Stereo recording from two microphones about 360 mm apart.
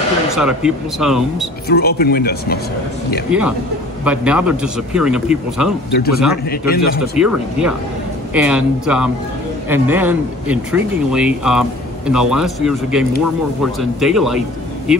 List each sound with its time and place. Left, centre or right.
0.4 s speech: centre
1.7 s speech: left
3.3 s speech: centre
5.9 s speech: left
7.2 s speech: centre